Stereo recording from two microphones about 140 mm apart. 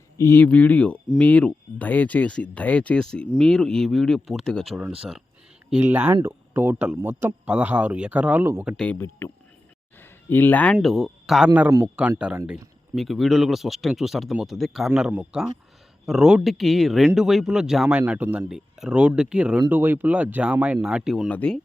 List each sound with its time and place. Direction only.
0.2 s speech: 15° left (ahead or behind)
5.7 s speech: 10° right (ahead or behind)
8.7 s speech: 5° left (ahead or behind)
9.0 s speech: 15° left (ahead or behind)
10.0 s a sound: 15° left (ahead or behind)
10.8 s speech: centre (ahead or behind)
21.2 s speech: 10° left (ahead or behind)